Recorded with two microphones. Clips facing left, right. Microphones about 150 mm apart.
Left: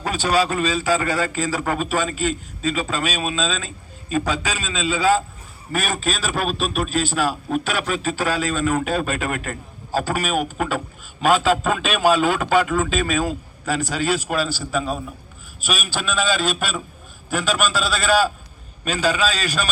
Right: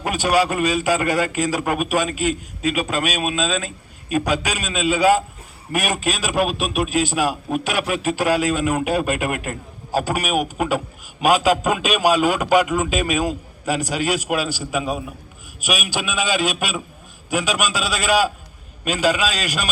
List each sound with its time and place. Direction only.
0.0 s a man's voice: 15° right (ahead or behind)